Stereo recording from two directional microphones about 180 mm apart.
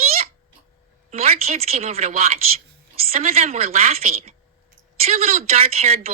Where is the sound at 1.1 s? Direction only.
35° right (ahead or behind).